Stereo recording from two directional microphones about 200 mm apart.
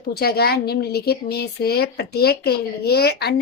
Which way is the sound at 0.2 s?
50° left (ahead or behind).